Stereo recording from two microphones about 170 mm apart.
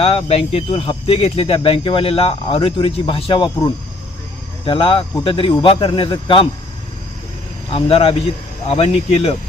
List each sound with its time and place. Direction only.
0.0 s speech: 35° left (ahead or behind)
7.7 s speech: 35° left (ahead or behind)